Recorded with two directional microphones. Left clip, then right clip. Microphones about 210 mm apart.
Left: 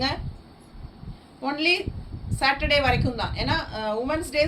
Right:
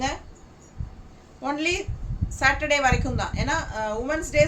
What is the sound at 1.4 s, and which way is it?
A woman's voice, 15° right (ahead or behind).